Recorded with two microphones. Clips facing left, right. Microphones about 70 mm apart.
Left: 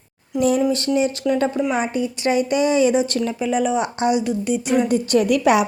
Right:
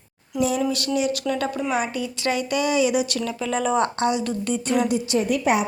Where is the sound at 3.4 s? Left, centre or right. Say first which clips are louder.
Left 1 dB; centre.